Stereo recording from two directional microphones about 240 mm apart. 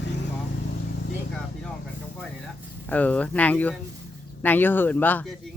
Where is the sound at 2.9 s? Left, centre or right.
Centre.